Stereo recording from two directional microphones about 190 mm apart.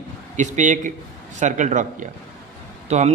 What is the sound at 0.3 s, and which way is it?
Speech, 40° right (ahead or behind).